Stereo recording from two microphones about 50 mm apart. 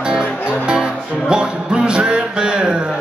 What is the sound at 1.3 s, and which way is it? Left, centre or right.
Music, centre.